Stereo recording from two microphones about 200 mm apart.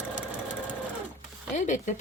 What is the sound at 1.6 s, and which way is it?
Speech, 40° left (ahead or behind).